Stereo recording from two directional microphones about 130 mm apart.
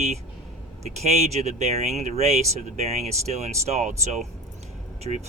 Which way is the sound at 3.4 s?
60° right (ahead or behind).